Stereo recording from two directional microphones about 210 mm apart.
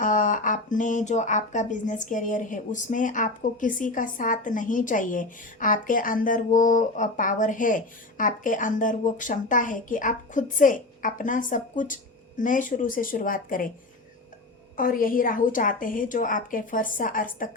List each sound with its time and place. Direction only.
0.0 s speech: 40° left (ahead or behind)
14.8 s speech: 40° left (ahead or behind)